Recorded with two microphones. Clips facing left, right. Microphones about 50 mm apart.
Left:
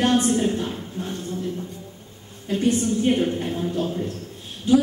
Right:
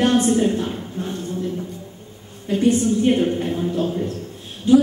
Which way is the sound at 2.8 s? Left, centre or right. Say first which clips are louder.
Right 3 dB; centre.